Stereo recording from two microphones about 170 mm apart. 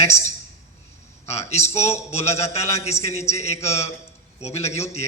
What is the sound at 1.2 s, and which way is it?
A man's voice, 40° left (ahead or behind).